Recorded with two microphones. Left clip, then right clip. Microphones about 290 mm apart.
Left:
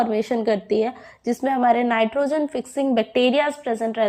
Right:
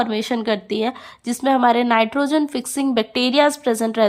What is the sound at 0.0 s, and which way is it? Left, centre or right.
A woman's voice, right.